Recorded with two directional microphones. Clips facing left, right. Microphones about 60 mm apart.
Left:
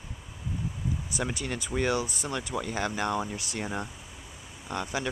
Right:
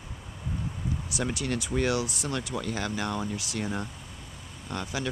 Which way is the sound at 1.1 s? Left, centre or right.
Centre.